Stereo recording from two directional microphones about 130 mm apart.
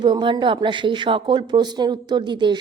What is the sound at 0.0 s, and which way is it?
A woman's voice, 35° right (ahead or behind).